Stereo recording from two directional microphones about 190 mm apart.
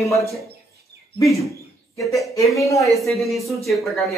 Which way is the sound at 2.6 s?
15° left (ahead or behind).